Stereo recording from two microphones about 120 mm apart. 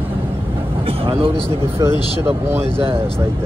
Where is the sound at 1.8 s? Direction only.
30° right (ahead or behind).